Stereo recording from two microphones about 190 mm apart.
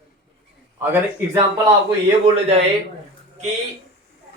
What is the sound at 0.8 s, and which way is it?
Speech, 10° right (ahead or behind).